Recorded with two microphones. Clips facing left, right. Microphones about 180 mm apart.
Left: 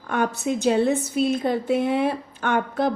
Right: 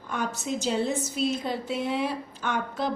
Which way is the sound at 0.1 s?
60° left (ahead or behind).